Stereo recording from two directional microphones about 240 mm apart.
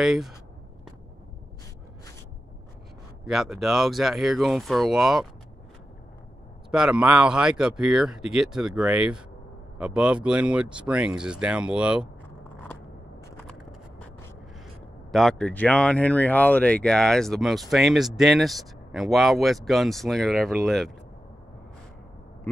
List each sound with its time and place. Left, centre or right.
0.0 s speech: centre
3.3 s speech: centre
6.7 s speech: centre
13.5 s a sound: centre
15.0 s speech: centre